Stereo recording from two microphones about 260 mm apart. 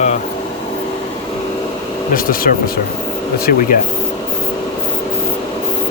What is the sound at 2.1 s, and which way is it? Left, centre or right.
Speech, left.